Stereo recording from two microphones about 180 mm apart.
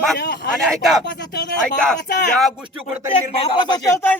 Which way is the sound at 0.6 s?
Centre (ahead or behind).